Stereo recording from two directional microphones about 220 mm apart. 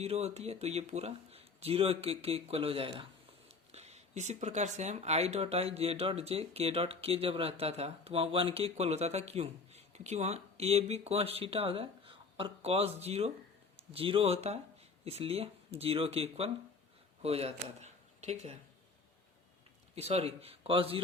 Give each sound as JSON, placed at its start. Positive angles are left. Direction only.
{"t": 0.0, "sound": "speech", "side_deg": -30}
{"t": 20.0, "sound": "speech", "side_deg": -30}